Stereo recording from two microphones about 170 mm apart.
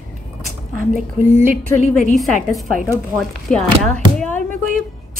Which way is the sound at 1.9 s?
Centre (ahead or behind).